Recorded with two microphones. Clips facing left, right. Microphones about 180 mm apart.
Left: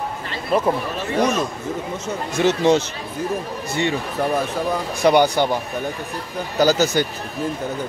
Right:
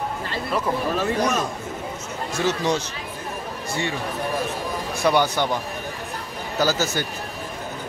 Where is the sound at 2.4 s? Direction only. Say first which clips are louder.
Left 7 dB; 25° left (ahead or behind).